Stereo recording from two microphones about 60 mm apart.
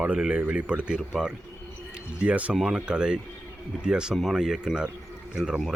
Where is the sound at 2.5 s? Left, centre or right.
Centre.